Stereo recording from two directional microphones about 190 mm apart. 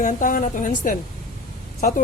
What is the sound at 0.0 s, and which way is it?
Speech, 45° left (ahead or behind).